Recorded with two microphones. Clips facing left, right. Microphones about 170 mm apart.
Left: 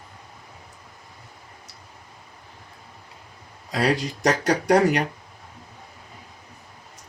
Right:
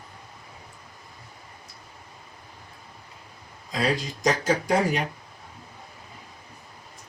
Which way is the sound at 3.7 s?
70° left (ahead or behind).